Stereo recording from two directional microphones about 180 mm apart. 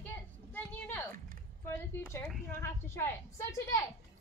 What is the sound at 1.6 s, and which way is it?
A woman's voice, 15° left (ahead or behind).